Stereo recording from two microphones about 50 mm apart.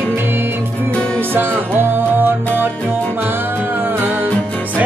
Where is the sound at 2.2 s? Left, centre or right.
Right.